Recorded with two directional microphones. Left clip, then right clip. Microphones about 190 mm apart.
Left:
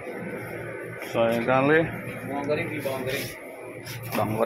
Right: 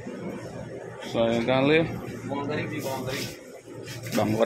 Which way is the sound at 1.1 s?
15° right (ahead or behind).